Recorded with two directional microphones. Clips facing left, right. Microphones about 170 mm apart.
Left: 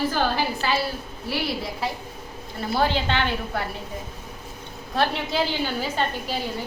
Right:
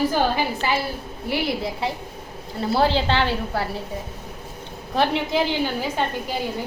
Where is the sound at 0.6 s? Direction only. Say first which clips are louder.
Right 1 dB; 20° right (ahead or behind); by 3.6 s 35° right (ahead or behind).